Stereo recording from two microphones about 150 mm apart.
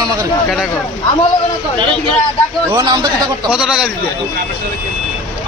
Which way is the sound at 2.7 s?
25° right (ahead or behind).